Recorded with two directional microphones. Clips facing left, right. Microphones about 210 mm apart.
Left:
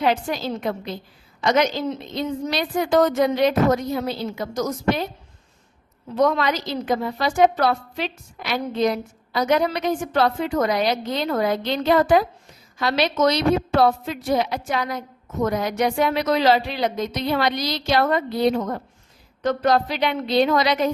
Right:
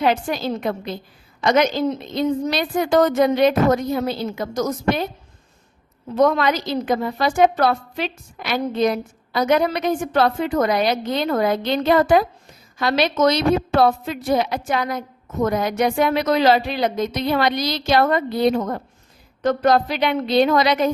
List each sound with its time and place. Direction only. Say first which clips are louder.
0.0 s a woman's voice: right 2 dB; 55° right (ahead or behind)
6.1 s a woman's voice: right 3 dB; 50° right (ahead or behind)